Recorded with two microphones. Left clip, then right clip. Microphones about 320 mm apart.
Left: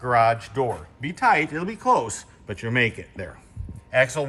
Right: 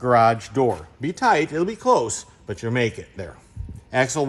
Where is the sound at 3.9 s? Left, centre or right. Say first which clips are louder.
Even; centre.